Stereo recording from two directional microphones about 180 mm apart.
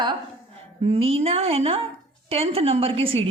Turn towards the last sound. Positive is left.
turn(degrees=-30)  # may be behind; listen again after turning